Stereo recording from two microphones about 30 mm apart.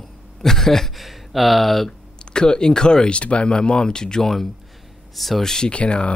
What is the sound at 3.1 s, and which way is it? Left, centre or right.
Speech, left.